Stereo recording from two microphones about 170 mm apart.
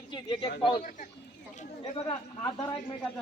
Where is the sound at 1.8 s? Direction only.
35° left (ahead or behind).